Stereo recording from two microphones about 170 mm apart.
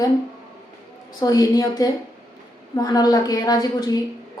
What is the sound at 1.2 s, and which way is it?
Speech, 20° left (ahead or behind).